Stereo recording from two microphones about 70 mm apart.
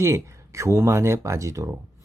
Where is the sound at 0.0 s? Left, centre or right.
Right.